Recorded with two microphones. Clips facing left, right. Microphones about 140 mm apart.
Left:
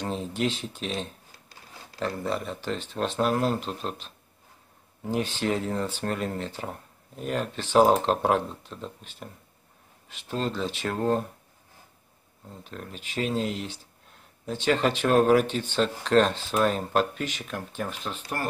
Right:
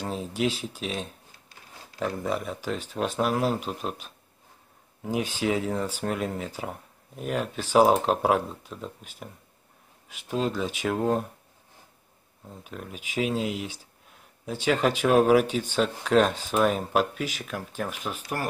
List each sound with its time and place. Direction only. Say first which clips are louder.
0.0 s speech: even; 5° right (ahead or behind)
12.4 s speech: right 1 dB; 5° right (ahead or behind)